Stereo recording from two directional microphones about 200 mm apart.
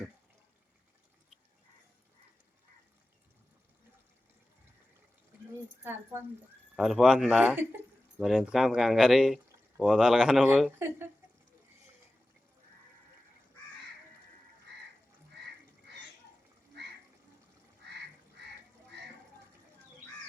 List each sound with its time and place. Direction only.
5.8 s speech: 10° right (ahead or behind)
17.8 s duck: 55° right (ahead or behind)